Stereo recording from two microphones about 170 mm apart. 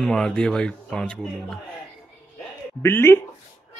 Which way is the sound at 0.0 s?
5° left (ahead or behind).